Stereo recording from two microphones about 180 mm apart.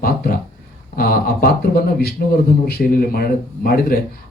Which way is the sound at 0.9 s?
55° left (ahead or behind).